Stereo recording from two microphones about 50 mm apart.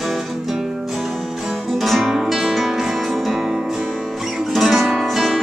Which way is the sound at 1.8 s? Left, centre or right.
Centre.